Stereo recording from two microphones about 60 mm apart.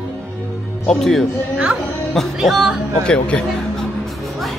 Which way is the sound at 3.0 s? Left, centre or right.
Centre.